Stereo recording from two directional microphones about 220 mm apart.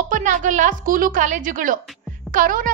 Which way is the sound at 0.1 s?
35° right (ahead or behind).